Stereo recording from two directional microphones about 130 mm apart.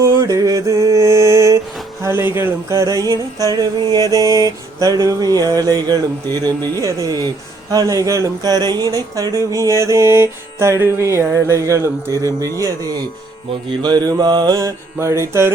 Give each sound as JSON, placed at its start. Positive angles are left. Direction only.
{"t": 0.0, "sound": "mantra", "side_deg": -25}
{"t": 2.0, "sound": "music", "side_deg": -20}